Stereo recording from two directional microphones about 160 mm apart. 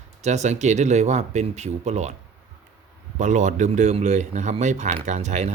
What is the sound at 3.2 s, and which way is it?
Speech, 50° right (ahead or behind).